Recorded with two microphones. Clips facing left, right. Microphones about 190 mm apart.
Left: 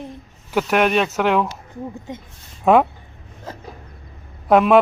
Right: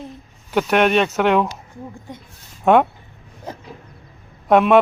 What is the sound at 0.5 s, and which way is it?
Speech, centre (ahead or behind).